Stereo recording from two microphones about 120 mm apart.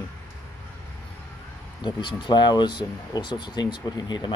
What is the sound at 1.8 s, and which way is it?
Speech, 40° left (ahead or behind).